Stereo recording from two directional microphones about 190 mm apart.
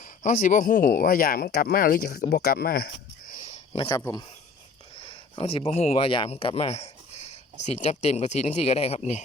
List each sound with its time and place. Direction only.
0.0 s speech: 40° left (ahead or behind)
3.8 s speech: 15° left (ahead or behind); by 9.0 s 35° left (ahead or behind)